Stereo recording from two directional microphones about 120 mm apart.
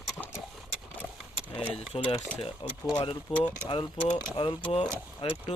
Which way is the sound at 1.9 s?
55° left (ahead or behind).